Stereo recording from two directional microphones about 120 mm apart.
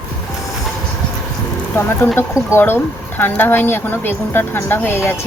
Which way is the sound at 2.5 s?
20° left (ahead or behind).